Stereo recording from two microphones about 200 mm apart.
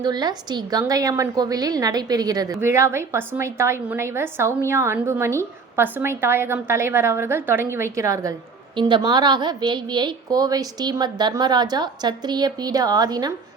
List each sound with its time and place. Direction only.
0.0 s a woman's voice: 20° right (ahead or behind)